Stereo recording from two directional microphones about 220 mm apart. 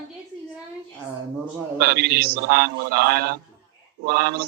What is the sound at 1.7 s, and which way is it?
A man's voice, 45° right (ahead or behind).